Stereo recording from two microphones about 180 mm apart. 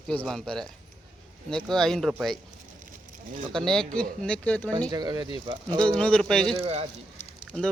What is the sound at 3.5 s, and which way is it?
Speech, 5° left (ahead or behind).